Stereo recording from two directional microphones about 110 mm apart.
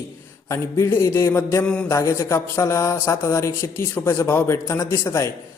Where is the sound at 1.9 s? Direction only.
30° left (ahead or behind).